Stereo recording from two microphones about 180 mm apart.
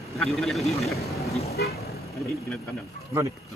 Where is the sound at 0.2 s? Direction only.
Centre (ahead or behind).